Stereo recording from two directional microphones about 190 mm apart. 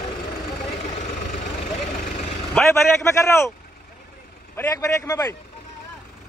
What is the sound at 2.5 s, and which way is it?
A man's voice, 15° left (ahead or behind).